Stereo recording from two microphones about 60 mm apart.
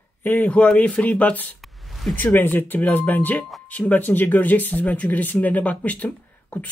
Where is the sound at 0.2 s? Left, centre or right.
Left.